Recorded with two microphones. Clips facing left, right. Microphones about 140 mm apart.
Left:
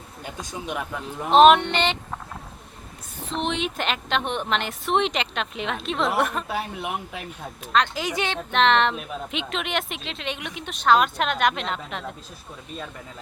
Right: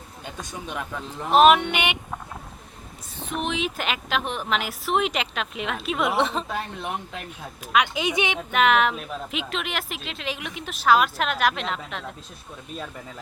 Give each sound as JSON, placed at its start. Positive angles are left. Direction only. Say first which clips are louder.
{"t": 0.3, "sound": "speech", "louder": "left 3 dB", "side_deg": 15}
{"t": 1.3, "sound": "a woman's voice", "louder": "left 2 dB", "side_deg": -5}
{"t": 3.3, "sound": "a woman's voice", "louder": "left 1 dB", "side_deg": 0}
{"t": 7.9, "sound": "speech", "louder": "right 2 dB", "side_deg": -20}
{"t": 8.4, "sound": "a woman's voice", "louder": "left 1 dB", "side_deg": -5}